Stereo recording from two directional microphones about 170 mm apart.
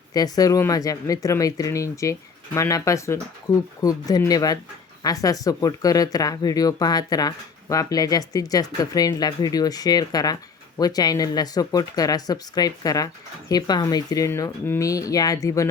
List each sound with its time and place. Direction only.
0.1 s speech: 20° left (ahead or behind)